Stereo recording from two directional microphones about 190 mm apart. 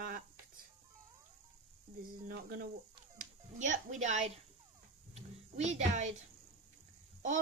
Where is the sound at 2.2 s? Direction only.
50° right (ahead or behind).